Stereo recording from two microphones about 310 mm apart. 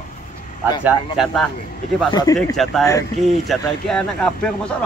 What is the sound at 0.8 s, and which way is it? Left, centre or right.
Speech, centre.